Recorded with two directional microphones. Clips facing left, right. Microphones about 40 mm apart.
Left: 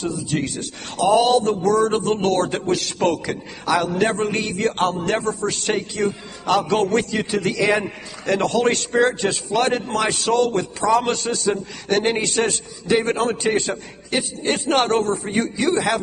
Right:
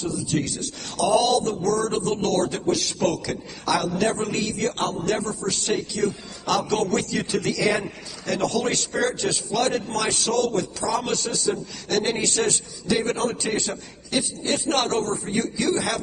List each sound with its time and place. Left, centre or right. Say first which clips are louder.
0.4 s a man's voice: left 2 dB; left